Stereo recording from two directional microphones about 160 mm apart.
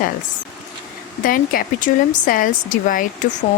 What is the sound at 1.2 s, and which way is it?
Speech, 60° left (ahead or behind).